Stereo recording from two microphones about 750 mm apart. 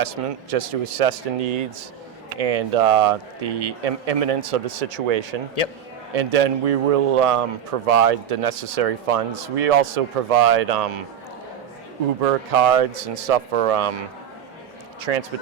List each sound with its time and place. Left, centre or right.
0.2 s a man's voice: right
12.2 s a man's voice: right
15.1 s speech: right